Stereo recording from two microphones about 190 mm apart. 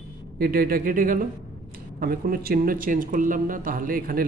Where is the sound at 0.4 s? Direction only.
50° right (ahead or behind).